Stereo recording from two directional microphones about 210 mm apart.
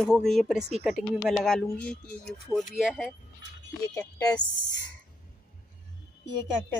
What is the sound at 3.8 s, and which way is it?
Speech, 15° left (ahead or behind).